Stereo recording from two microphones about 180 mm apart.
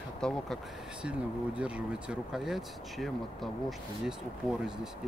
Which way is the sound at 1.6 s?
5° right (ahead or behind).